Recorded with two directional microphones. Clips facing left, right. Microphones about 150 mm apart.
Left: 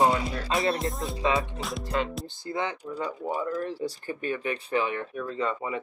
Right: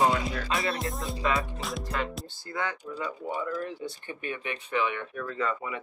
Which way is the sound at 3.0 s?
35° left (ahead or behind).